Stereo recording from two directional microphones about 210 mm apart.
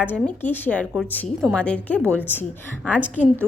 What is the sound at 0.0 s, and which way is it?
A woman's voice, 10° left (ahead or behind).